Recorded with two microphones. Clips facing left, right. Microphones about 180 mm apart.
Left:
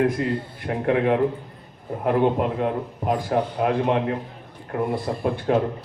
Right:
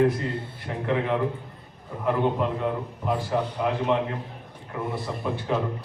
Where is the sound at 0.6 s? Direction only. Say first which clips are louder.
Left 5 dB; 55° left (ahead or behind).